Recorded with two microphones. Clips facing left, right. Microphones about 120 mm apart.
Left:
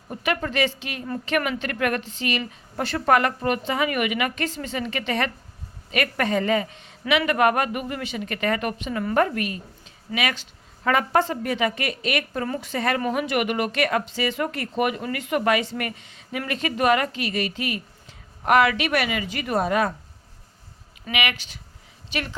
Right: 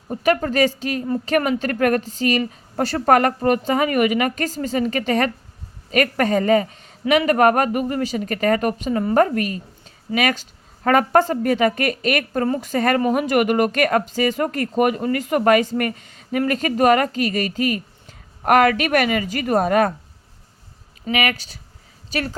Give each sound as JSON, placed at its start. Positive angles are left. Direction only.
{"t": 0.1, "sound": "a woman's voice", "side_deg": -40}
{"t": 21.0, "sound": "a woman's voice", "side_deg": -40}